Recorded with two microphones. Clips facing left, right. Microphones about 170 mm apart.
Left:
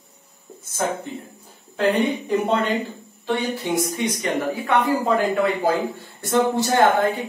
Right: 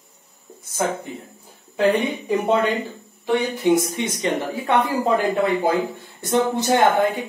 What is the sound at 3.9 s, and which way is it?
Speech, 25° right (ahead or behind).